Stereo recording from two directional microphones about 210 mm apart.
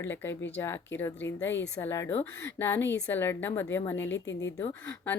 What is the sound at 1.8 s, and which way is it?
Speech, 10° left (ahead or behind).